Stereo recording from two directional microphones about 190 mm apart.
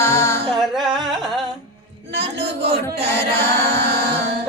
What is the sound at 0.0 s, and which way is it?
Music, 15° left (ahead or behind).